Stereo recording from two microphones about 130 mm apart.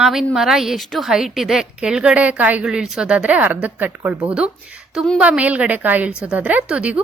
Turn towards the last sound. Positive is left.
turn(degrees=-10)  # may be behind; listen again after turning